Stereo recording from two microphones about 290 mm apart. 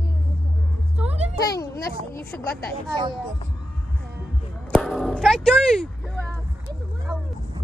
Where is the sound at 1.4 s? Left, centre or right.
Left.